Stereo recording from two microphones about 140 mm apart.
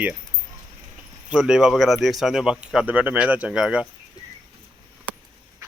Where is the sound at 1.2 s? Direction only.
5° right (ahead or behind).